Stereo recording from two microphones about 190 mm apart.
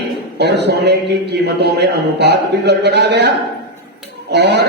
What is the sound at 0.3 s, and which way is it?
A man's voice, 65° right (ahead or behind).